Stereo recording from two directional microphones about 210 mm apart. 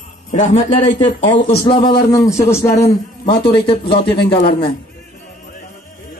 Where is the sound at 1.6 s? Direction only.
25° left (ahead or behind).